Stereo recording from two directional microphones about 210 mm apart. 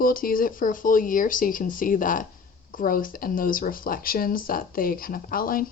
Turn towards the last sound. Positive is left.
turn(degrees=45)  # may be behind; listen again after turning